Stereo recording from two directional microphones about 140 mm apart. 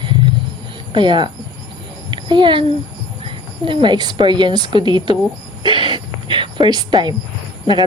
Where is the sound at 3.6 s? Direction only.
35° right (ahead or behind).